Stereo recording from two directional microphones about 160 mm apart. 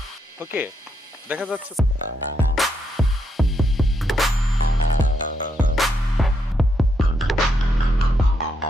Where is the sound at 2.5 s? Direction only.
Centre (ahead or behind).